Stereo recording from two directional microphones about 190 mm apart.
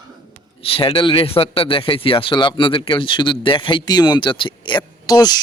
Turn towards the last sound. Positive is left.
turn(degrees=20)  # may be behind; listen again after turning